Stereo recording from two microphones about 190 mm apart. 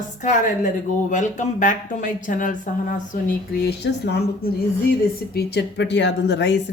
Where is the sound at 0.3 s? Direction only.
40° left (ahead or behind).